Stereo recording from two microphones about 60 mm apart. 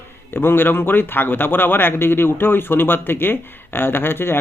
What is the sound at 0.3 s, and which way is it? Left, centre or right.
Speech, left.